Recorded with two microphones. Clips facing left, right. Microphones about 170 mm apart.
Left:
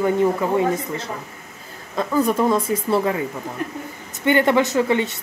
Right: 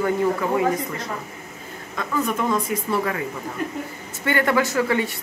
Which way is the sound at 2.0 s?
35° left (ahead or behind).